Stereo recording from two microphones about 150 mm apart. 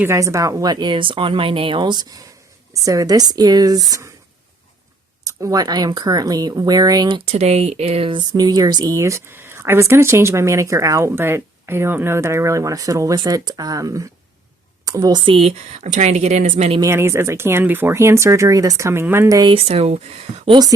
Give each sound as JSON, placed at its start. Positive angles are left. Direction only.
{"t": 0.0, "sound": "speech", "side_deg": -20}
{"t": 5.2, "sound": "speech", "side_deg": -20}
{"t": 7.3, "sound": "speech", "side_deg": -45}
{"t": 16.8, "sound": "speech", "side_deg": -15}
{"t": 19.5, "sound": "speech", "side_deg": -45}